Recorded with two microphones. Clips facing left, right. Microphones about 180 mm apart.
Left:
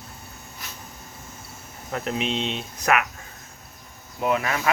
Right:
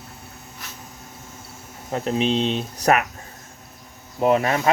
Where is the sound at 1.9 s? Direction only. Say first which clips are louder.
Right 5 dB; 30° right (ahead or behind).